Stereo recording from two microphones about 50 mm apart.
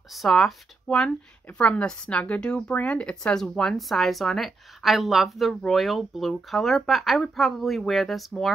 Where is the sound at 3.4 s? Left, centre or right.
Centre.